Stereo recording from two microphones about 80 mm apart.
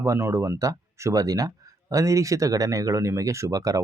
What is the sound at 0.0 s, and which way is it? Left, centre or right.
Speech, right.